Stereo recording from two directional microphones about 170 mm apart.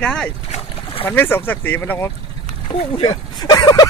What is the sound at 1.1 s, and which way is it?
Speech, 10° left (ahead or behind).